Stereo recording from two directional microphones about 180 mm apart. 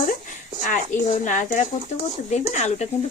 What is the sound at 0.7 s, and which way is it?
Speech, 45° left (ahead or behind).